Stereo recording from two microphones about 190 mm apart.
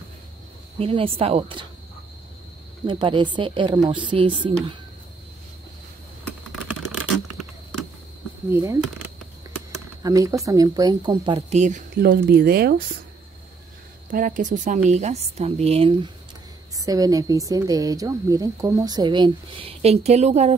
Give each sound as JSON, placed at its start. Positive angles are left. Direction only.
{"t": 0.7, "sound": "a woman's voice", "side_deg": -30}
{"t": 2.9, "sound": "a woman's voice", "side_deg": -25}
{"t": 8.5, "sound": "speech", "side_deg": -15}
{"t": 10.0, "sound": "a woman's voice", "side_deg": -15}
{"t": 11.5, "sound": "speech", "side_deg": -40}
{"t": 14.1, "sound": "a woman's voice", "side_deg": -45}